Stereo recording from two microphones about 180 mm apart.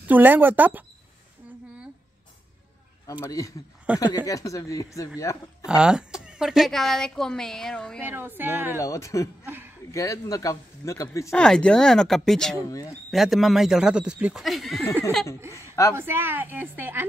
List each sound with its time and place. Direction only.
0.0 s a woman's voice: 10° right (ahead or behind)
3.1 s speech: 15° left (ahead or behind)
3.9 s a woman's voice: 5° right (ahead or behind)
4.3 s speech: 20° left (ahead or behind)
5.7 s a woman's voice: 5° right (ahead or behind)
8.0 s a woman's voice: 10° right (ahead or behind)
8.7 s speech: 15° left (ahead or behind)
9.5 s a sound: 10° right (ahead or behind)
9.8 s speech: 15° left (ahead or behind)
11.3 s a woman's voice: 5° left (ahead or behind)
12.5 s speech: 20° left (ahead or behind)
13.1 s a woman's voice: centre (ahead or behind)
15.9 s a woman's voice: 15° right (ahead or behind)